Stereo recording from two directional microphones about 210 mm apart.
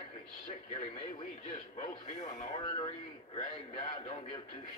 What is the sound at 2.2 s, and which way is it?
Speech, 30° left (ahead or behind).